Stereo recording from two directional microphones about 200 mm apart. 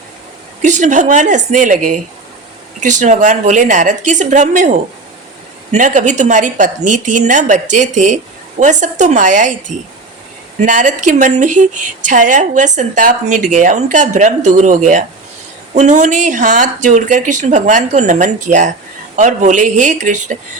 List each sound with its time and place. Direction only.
0.6 s speech: 35° right (ahead or behind)
5.7 s speech: 40° right (ahead or behind)